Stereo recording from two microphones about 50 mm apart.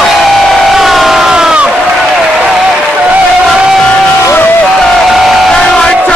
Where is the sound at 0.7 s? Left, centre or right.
Centre.